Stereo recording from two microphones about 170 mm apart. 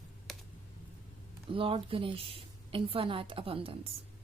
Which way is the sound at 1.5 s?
30° right (ahead or behind).